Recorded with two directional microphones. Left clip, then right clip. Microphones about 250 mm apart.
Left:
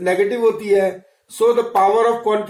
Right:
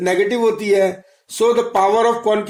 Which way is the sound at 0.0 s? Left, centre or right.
Right.